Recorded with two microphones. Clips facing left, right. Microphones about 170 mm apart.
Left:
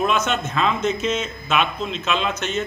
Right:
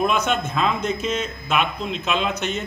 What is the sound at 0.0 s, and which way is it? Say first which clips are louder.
A man's voice: even; 10° right (ahead or behind).